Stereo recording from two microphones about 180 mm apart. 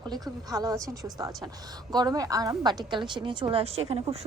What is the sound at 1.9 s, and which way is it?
A woman's voice, 20° right (ahead or behind).